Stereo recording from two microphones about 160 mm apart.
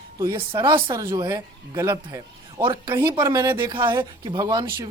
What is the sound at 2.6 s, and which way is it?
Speech, 30° right (ahead or behind).